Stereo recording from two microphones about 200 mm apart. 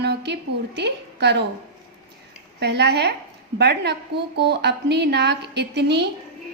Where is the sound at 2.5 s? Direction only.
55° right (ahead or behind).